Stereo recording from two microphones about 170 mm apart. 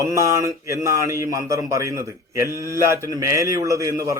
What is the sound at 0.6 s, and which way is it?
A man's voice, 20° right (ahead or behind).